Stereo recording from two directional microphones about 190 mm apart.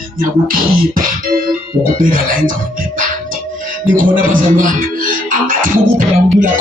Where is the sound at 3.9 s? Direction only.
45° right (ahead or behind).